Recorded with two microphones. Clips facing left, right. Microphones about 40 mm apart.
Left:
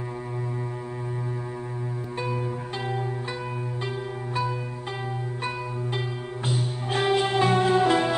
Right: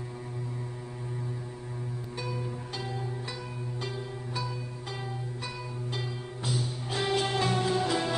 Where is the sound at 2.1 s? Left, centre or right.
Left.